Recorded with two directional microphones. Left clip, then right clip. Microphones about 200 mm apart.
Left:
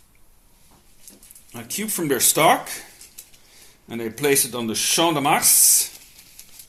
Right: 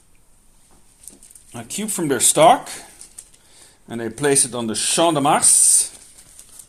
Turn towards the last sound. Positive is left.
turn(degrees=-35)  # may be behind; listen again after turning